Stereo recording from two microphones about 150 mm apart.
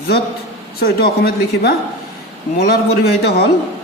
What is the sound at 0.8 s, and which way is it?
A woman's voice, 90° left.